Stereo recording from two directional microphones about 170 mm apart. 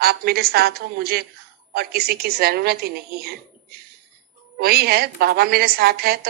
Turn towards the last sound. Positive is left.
turn(degrees=-65)  # may be behind; listen again after turning